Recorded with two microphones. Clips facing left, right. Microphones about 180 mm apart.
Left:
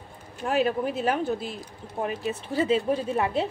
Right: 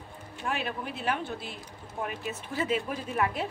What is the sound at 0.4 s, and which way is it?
Speech, 40° left (ahead or behind).